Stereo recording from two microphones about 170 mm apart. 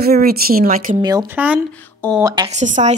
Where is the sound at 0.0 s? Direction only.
65° right (ahead or behind).